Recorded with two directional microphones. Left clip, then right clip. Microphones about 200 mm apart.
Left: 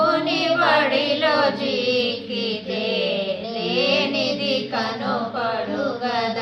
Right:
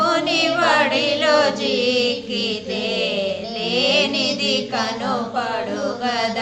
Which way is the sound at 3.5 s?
30° right (ahead or behind).